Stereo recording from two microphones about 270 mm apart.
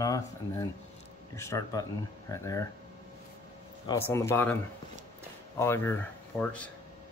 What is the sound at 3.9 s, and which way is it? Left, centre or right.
Speech, centre.